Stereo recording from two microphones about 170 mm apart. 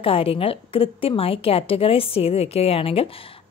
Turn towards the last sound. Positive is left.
turn(degrees=35)  # may be behind; listen again after turning